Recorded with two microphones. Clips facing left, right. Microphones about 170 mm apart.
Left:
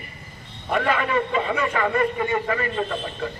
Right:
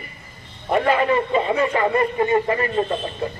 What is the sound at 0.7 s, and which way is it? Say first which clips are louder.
A man's voice: right 4 dB; 30° right (ahead or behind).